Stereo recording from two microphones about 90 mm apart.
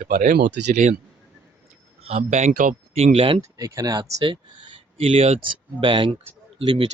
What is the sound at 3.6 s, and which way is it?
Speech, 40° right (ahead or behind).